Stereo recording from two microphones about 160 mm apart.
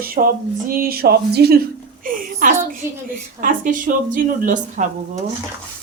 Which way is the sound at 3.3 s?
55° right (ahead or behind).